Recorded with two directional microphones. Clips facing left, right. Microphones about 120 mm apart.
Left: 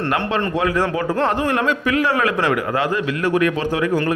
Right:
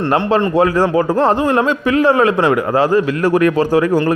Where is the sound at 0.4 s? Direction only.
30° right (ahead or behind).